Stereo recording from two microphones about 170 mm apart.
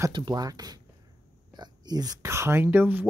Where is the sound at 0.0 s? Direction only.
25° right (ahead or behind).